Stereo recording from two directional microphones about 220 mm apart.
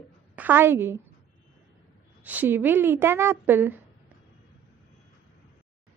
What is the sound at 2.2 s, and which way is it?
A woman's voice, 5° right (ahead or behind).